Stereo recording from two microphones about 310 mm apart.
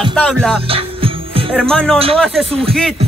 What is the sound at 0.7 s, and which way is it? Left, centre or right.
Music, centre.